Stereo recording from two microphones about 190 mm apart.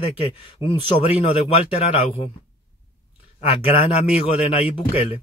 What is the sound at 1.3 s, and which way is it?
Speech, 30° left (ahead or behind).